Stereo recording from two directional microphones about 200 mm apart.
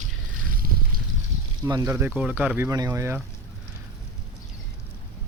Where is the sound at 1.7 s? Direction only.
20° right (ahead or behind).